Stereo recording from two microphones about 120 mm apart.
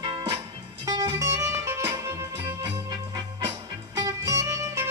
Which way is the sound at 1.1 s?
25° right (ahead or behind).